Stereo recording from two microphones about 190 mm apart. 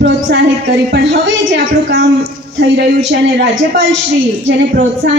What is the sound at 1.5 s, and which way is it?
A woman's voice, 65° right (ahead or behind).